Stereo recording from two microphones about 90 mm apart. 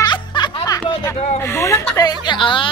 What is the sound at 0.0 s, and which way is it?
Music, 50° left (ahead or behind).